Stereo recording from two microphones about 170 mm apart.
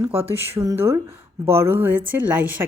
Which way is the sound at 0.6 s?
15° right (ahead or behind).